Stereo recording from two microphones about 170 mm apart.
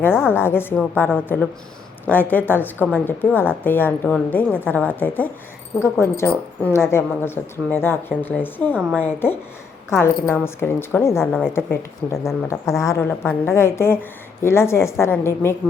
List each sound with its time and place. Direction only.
0.3 s a woman's voice: 15° left (ahead or behind)